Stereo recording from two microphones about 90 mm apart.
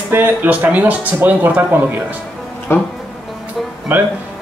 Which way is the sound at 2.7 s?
30° left (ahead or behind).